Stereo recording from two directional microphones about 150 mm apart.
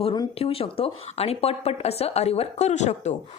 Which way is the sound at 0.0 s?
35° left (ahead or behind).